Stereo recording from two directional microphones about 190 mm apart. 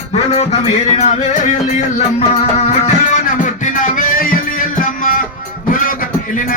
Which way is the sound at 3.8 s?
45° left (ahead or behind).